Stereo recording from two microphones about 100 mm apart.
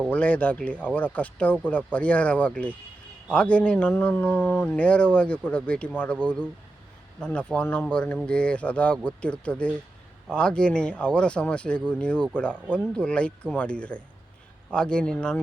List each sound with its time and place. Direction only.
0.1 s speech: 15° left (ahead or behind)
7.2 s speech: 10° left (ahead or behind)